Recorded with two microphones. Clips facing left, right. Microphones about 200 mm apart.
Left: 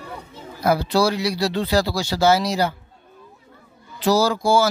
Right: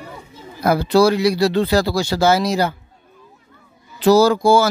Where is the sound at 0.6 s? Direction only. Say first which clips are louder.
Right 5 dB; 55° right (ahead or behind).